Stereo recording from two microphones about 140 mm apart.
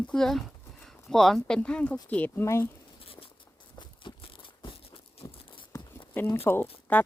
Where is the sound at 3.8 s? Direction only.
35° left (ahead or behind).